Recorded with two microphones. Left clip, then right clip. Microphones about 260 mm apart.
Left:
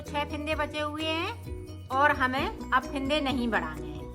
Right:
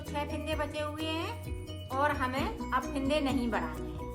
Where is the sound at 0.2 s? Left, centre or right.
Centre.